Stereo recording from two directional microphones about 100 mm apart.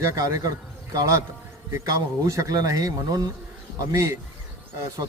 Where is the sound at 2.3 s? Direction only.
35° right (ahead or behind).